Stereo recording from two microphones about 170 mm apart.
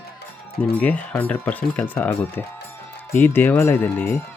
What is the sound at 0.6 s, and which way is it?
Speech, 10° left (ahead or behind).